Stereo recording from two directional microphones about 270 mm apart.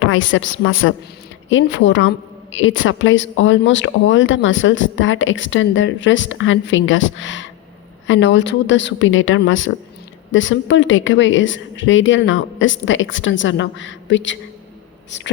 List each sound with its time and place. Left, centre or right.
0.0 s speech: left